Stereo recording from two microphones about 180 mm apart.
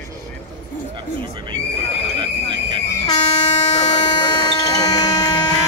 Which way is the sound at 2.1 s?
25° right (ahead or behind).